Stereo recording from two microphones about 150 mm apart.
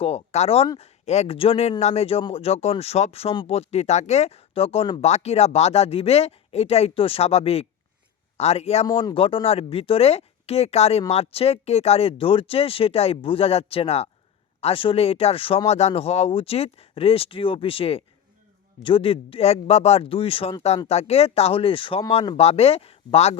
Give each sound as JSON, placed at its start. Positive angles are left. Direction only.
{"t": 0.0, "sound": "speech", "side_deg": 45}
{"t": 8.9, "sound": "speech", "side_deg": 25}
{"t": 9.1, "sound": "speech", "side_deg": 40}